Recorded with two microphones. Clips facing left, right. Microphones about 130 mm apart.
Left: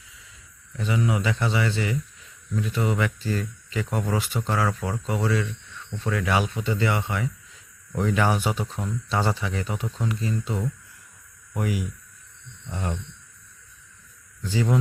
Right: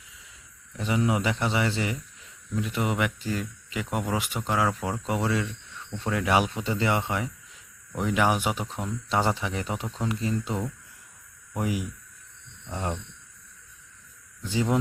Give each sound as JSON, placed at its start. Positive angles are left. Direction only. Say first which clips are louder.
{"t": 0.8, "sound": "speech", "louder": "even", "side_deg": -25}
{"t": 7.9, "sound": "speech", "louder": "left 1 dB", "side_deg": -10}
{"t": 14.4, "sound": "speech", "louder": "left 1 dB", "side_deg": -20}